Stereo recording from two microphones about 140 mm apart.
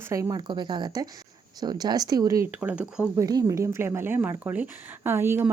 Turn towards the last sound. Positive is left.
turn(degrees=-15)  # may be behind; listen again after turning